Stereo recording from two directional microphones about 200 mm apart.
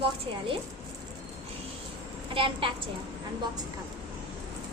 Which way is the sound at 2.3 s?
25° right (ahead or behind).